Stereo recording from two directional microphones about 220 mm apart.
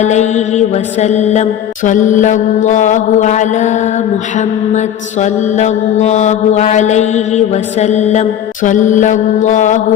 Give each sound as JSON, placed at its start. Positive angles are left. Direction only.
{"t": 0.0, "sound": "mantra", "side_deg": 30}